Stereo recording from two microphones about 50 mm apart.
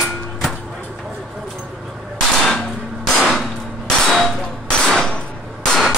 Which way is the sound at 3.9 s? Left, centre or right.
Centre.